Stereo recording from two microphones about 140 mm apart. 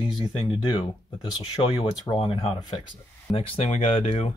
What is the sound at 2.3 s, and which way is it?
Speech, 45° left (ahead or behind).